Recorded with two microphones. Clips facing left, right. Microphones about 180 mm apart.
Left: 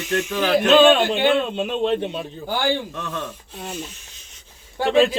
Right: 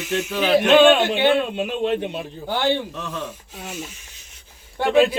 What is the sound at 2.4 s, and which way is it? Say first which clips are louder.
Speech: right 1 dB; 25° right (ahead or behind).